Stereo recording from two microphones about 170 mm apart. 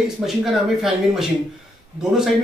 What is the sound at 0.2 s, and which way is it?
Speech, centre (ahead or behind).